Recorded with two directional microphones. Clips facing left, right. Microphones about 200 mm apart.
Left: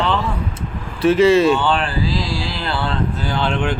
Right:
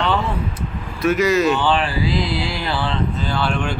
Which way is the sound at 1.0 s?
30° left (ahead or behind).